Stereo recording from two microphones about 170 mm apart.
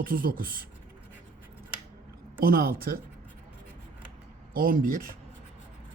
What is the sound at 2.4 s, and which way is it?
Speech, 60° right (ahead or behind).